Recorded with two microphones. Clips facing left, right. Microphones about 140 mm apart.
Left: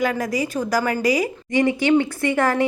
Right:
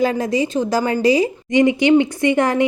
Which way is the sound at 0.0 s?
25° right (ahead or behind).